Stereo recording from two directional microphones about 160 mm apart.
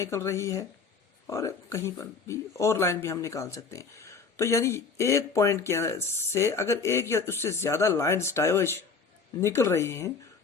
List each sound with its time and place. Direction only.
0.0 s speech: 20° left (ahead or behind)